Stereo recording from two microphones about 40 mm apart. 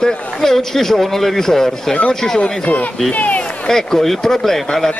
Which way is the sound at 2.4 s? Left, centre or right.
Left.